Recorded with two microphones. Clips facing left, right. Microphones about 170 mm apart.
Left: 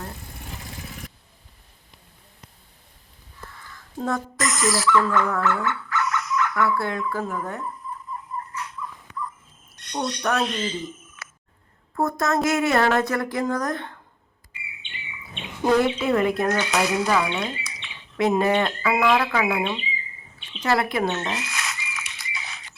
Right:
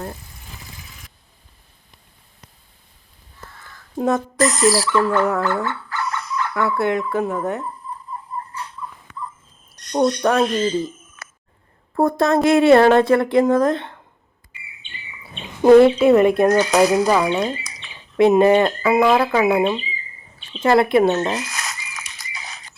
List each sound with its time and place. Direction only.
3.9 s speech: 20° right (ahead or behind)
4.4 s speech: 35° right (ahead or behind)
8.1 s tick-tock: 30° right (ahead or behind)
9.7 s speech: 40° right (ahead or behind)
11.9 s speech: 30° right (ahead or behind)
14.7 s chirp: 40° right (ahead or behind)
16.5 s speech: 40° right (ahead or behind)
18.2 s speech: 20° right (ahead or behind)
18.5 s speech: 40° right (ahead or behind); by 21.1 s 25° right (ahead or behind)
21.1 s a sound: 40° right (ahead or behind)